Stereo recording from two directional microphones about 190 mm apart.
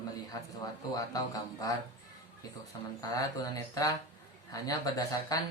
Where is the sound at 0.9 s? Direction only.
20° left (ahead or behind).